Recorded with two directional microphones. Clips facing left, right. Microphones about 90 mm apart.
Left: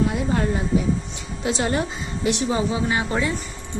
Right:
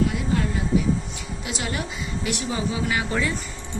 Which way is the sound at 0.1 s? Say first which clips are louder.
Left 2 dB; 30° left (ahead or behind).